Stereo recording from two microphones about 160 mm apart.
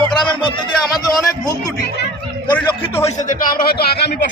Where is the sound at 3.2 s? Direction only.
70° left (ahead or behind).